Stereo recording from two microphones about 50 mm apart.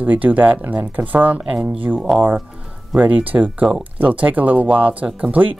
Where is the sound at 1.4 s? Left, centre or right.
Right.